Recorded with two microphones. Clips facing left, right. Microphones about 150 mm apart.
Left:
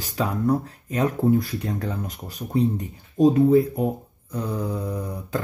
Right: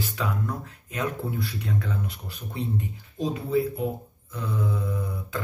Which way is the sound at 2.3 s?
40° left (ahead or behind).